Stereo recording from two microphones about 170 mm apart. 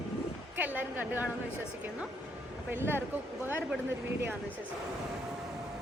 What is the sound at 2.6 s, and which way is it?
Speech, 10° right (ahead or behind).